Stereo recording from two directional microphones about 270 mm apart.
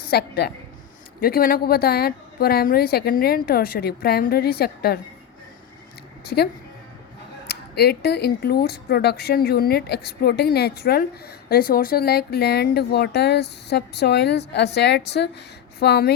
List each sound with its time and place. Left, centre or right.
0.1 s speech: left
6.2 s a woman's voice: left